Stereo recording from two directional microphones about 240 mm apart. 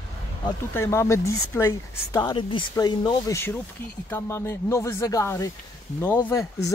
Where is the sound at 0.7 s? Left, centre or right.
Centre.